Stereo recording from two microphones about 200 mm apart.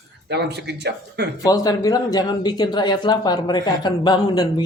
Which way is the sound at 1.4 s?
20° left (ahead or behind).